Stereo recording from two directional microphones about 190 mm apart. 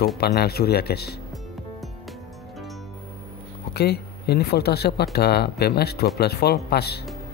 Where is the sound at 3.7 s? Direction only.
60° left (ahead or behind).